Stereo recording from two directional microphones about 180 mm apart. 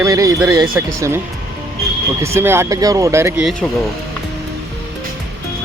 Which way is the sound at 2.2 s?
15° right (ahead or behind).